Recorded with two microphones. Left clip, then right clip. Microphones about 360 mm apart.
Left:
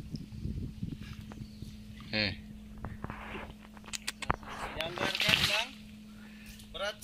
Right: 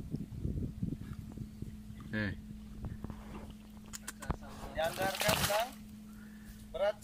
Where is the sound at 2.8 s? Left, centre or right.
Left.